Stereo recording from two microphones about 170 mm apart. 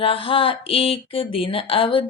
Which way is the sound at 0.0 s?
30° left (ahead or behind).